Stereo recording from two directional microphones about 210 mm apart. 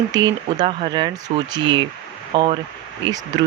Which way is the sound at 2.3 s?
25° right (ahead or behind).